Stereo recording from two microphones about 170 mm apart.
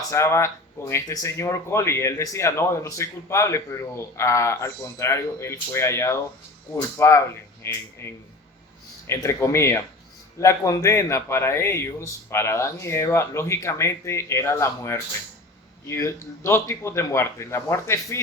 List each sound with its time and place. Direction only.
0.1 s speech: 15° left (ahead or behind)